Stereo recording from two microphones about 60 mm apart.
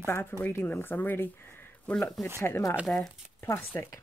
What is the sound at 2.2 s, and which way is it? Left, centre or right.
Speech, centre.